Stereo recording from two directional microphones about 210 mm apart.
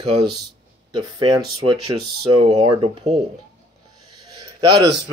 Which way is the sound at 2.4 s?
20° right (ahead or behind).